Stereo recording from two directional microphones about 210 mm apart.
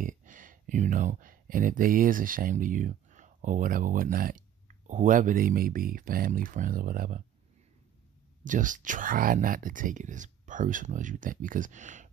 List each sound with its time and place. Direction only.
0.0 s speech: 40° right (ahead or behind)
8.5 s speech: 40° right (ahead or behind)